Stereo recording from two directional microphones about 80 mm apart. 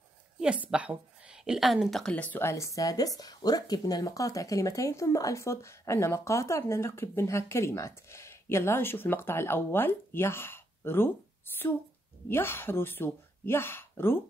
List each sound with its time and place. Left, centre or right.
0.4 s a woman's voice: centre
2.1 s speech: centre
2.4 s speech: left
12.3 s speech: left